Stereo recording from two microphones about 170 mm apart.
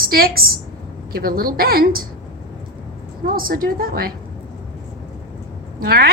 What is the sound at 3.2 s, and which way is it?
Speech, 60° right (ahead or behind).